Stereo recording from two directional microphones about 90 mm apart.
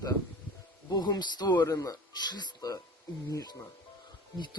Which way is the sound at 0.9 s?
45° left (ahead or behind).